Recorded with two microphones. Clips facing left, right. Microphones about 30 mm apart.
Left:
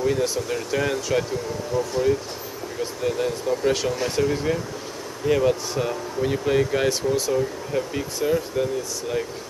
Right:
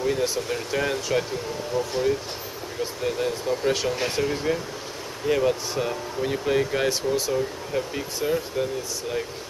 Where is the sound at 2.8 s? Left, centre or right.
Centre.